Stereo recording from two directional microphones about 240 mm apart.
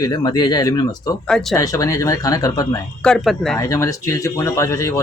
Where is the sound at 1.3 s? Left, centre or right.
Centre.